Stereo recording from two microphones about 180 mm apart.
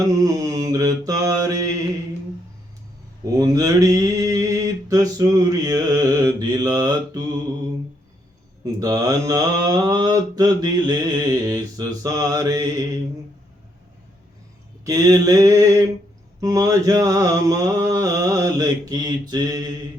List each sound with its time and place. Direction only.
0.2 s mantra: 20° right (ahead or behind)
3.2 s mantra: 20° right (ahead or behind)
8.6 s mantra: 20° right (ahead or behind)
14.8 s mantra: 20° right (ahead or behind)